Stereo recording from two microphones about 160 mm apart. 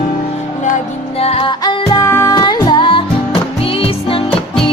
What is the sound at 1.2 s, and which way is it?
Music, 35° left (ahead or behind).